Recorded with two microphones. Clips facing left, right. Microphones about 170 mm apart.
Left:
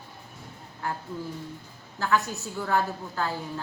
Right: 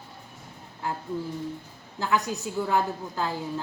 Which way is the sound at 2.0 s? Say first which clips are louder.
Even; 15° right (ahead or behind).